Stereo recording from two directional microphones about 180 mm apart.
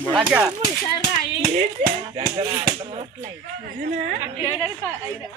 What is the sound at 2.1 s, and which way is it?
Speech, 20° right (ahead or behind).